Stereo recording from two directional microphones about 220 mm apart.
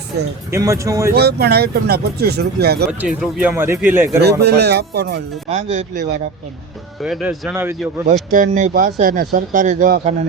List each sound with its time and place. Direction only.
0.5 s speech: 15° right (ahead or behind)
1.1 s speech: 45° right (ahead or behind)
3.0 s speech: 5° right (ahead or behind)
4.2 s speech: 50° right (ahead or behind)
5.5 s speech: 30° right (ahead or behind)
7.0 s speech: 5° right (ahead or behind)
8.3 s speech: 35° right (ahead or behind)